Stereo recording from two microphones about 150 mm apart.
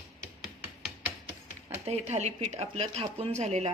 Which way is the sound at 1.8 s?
45° right (ahead or behind).